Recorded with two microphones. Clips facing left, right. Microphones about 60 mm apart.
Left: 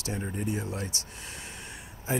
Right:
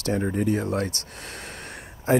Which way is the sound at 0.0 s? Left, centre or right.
Right.